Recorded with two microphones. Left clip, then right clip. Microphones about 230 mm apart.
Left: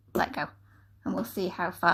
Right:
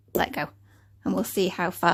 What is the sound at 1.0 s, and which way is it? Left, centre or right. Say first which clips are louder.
Speech: right 6 dB; right.